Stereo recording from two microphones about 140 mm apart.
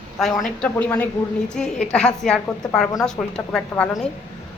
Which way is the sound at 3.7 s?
15° left (ahead or behind).